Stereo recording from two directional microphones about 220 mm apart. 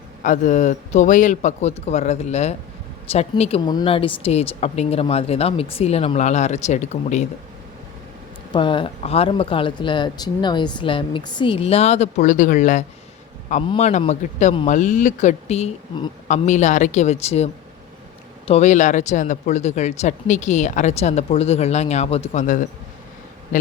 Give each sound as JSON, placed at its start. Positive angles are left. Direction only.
{"t": 0.2, "sound": "speech", "side_deg": 35}
{"t": 8.5, "sound": "speech", "side_deg": 20}